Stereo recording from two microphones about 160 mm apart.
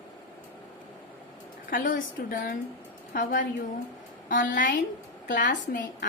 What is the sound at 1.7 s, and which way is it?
Speech, 60° left (ahead or behind).